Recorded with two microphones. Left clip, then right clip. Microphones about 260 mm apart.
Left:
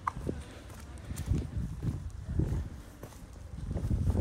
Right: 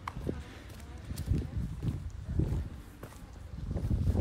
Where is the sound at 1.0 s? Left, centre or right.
Centre.